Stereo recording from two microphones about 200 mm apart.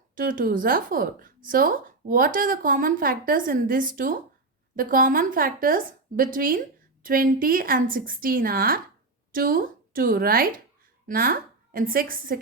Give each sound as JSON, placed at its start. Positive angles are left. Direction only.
{"t": 0.2, "sound": "a woman's voice", "side_deg": -45}